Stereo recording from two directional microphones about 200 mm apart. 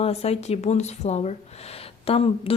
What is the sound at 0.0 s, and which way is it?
A woman's voice, 30° left (ahead or behind).